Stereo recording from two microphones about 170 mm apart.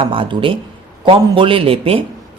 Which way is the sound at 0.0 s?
30° right (ahead or behind).